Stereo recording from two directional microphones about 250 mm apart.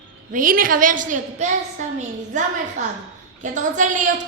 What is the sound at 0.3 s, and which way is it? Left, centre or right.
A woman's voice, right.